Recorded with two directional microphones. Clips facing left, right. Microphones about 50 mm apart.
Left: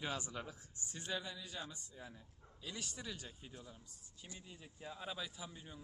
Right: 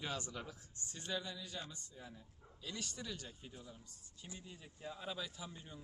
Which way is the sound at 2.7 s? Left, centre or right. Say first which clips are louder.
Right 1 dB; centre.